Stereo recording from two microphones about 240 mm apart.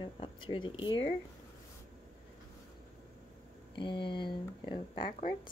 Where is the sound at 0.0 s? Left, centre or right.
Centre.